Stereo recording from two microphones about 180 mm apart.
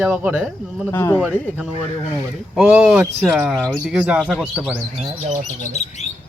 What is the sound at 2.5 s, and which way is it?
Speech, 10° right (ahead or behind).